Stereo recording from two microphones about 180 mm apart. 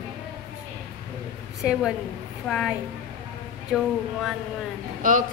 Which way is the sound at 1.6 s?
5° right (ahead or behind).